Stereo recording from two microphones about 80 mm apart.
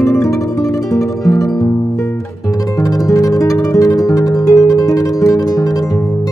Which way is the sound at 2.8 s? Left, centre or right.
Left.